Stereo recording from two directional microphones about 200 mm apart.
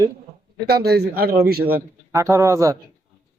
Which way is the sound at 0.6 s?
50° right (ahead or behind).